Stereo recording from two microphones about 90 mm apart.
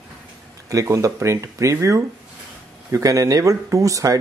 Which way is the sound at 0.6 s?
35° right (ahead or behind).